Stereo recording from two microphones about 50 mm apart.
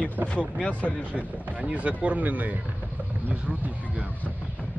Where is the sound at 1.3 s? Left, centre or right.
Right.